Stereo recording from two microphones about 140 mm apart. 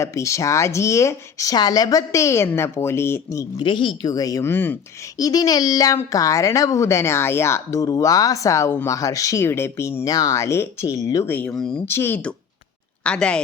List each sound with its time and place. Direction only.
0.0 s speech: 20° left (ahead or behind)
3.6 s speech: 35° left (ahead or behind); by 4.8 s 15° left (ahead or behind)
5.1 s speech: 25° left (ahead or behind); by 11.8 s 5° left (ahead or behind)
11.9 s speech: 15° left (ahead or behind)